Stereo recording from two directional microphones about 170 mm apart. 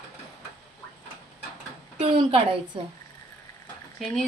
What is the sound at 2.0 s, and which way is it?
Speech, 35° right (ahead or behind).